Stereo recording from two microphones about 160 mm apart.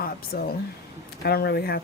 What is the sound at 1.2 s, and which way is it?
Speech, 85° left.